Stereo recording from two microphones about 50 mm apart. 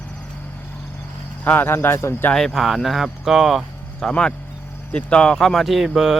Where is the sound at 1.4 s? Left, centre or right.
Left.